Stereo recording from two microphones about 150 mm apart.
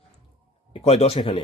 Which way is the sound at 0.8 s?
45° left (ahead or behind).